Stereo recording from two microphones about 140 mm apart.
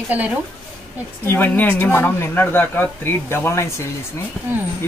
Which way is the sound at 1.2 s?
15° left (ahead or behind).